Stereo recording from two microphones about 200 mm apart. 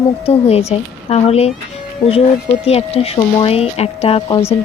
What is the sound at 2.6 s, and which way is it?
Speech, 30° left (ahead or behind).